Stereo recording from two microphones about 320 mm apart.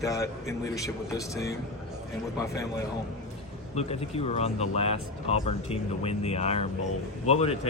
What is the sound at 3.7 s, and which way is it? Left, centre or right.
Speech, centre.